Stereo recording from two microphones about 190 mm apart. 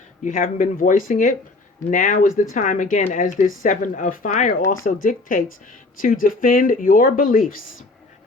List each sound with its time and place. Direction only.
0.3 s speech: 45° left (ahead or behind)